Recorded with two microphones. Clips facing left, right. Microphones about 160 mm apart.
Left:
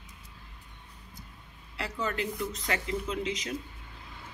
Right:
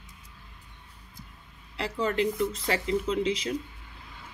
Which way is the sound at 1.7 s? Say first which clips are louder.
Right 6 dB; 35° right (ahead or behind).